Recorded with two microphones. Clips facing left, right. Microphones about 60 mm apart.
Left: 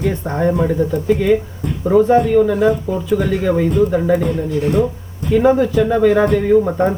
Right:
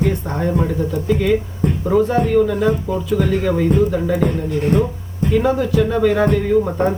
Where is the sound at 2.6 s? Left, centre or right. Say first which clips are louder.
Left 2 dB; left.